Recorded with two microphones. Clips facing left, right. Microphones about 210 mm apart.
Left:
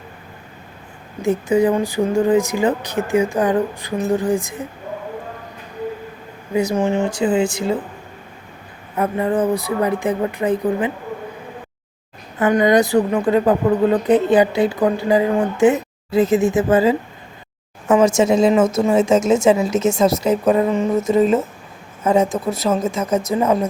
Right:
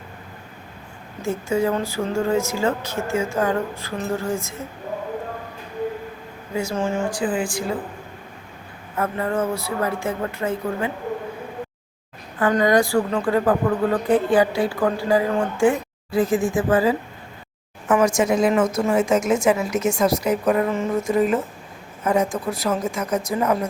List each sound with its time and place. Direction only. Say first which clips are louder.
1.2 s speech: left 6 dB; 15° left (ahead or behind)
6.5 s a woman's voice: left 6 dB; 20° left (ahead or behind)
9.0 s speech: left 5 dB; 15° left (ahead or behind)
12.4 s a woman's voice: left 3 dB; 15° left (ahead or behind)